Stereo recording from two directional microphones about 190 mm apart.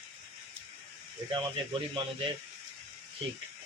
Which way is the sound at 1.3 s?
25° right (ahead or behind).